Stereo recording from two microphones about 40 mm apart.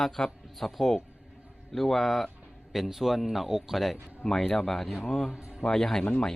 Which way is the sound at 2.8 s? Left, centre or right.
Centre.